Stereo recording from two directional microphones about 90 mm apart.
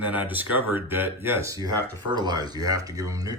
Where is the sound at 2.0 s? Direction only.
55° right (ahead or behind).